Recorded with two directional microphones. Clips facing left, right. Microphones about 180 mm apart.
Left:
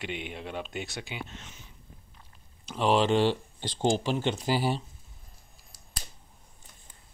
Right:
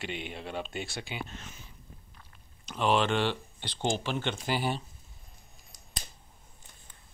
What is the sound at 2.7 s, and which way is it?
Speech, 30° left (ahead or behind).